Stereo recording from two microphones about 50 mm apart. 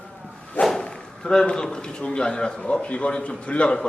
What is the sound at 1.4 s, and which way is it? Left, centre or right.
A man's voice, centre.